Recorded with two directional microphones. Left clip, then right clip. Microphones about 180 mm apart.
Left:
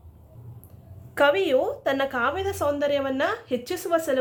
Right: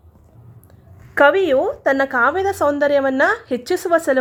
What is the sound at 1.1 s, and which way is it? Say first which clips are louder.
Speech: right 7 dB; 40° right (ahead or behind).